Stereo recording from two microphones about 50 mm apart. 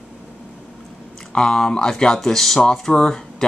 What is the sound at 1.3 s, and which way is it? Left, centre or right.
Speech, centre.